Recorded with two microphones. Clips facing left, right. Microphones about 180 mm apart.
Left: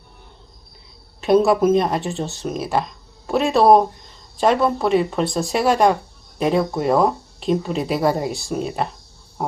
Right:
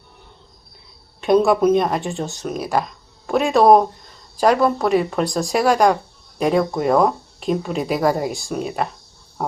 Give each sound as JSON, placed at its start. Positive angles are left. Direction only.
{"t": 1.2, "sound": "speech", "side_deg": 0}